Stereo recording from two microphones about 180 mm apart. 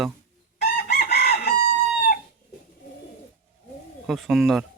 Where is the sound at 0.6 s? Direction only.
60° left (ahead or behind).